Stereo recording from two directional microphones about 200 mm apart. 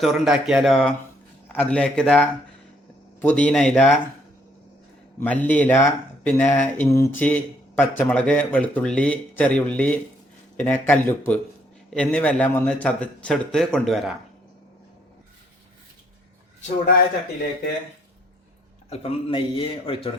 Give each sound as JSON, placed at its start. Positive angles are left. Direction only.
{"t": 0.0, "sound": "a man's voice", "side_deg": 0}
{"t": 5.2, "sound": "a man's voice", "side_deg": 10}
{"t": 16.6, "sound": "a man's voice", "side_deg": 35}
{"t": 18.9, "sound": "speech", "side_deg": 30}